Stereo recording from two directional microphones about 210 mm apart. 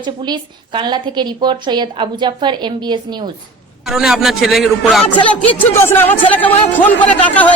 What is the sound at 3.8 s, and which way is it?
A man's voice, centre (ahead or behind).